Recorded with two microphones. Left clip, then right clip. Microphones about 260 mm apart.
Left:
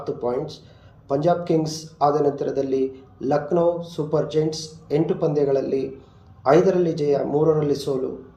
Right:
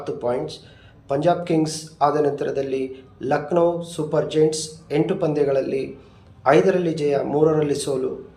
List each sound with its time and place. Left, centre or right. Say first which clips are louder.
0.0 s a man's voice: right 1 dB; right
7.4 s speech: right 3 dB; right